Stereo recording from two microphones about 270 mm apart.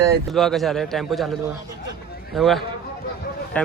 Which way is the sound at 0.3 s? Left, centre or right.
Centre.